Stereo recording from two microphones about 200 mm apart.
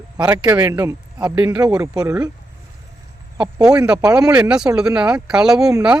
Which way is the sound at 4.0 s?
20° right (ahead or behind).